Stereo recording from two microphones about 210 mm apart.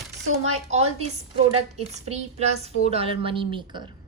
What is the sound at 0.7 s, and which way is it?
A woman's voice, 30° right (ahead or behind).